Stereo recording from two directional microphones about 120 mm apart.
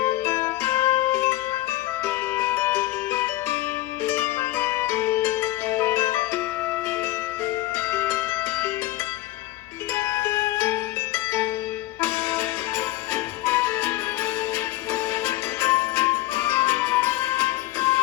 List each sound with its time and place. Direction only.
0.3 s music: 20° left (ahead or behind)
7.9 s music: 20° left (ahead or behind)
9.9 s music: 20° left (ahead or behind)
14.9 s music: 20° left (ahead or behind)